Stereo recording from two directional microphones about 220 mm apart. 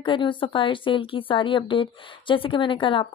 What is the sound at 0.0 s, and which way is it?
Speech, 20° left (ahead or behind).